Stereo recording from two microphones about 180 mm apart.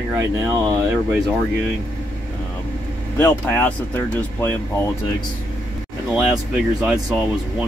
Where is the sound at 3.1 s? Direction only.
10° left (ahead or behind).